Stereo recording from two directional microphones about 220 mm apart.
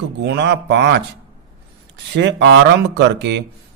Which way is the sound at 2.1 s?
50° right (ahead or behind).